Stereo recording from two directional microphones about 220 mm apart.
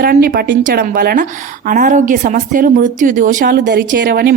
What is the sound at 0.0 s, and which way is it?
A woman's voice, 40° right (ahead or behind).